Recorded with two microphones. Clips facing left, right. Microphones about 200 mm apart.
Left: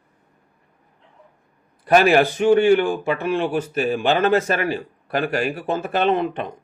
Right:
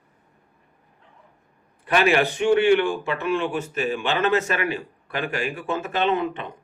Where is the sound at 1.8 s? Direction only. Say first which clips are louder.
Left 5 dB; 40° left (ahead or behind).